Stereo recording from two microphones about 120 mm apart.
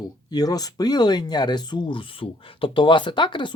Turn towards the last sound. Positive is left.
turn(degrees=40)  # may be behind; listen again after turning